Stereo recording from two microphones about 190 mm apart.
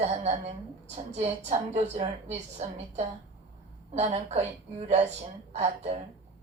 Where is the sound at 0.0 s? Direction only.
35° right (ahead or behind).